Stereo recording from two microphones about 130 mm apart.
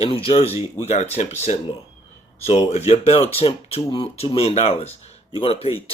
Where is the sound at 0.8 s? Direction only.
60° left (ahead or behind).